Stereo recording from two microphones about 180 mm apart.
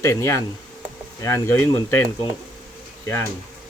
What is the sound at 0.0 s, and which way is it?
Speech, 15° left (ahead or behind).